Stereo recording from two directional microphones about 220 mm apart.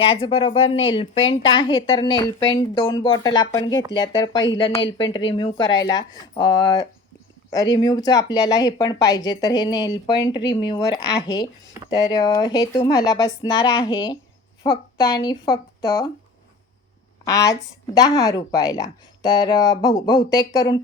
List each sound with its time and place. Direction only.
0.0 s a woman's voice: 25° left (ahead or behind)
17.2 s speech: 15° left (ahead or behind)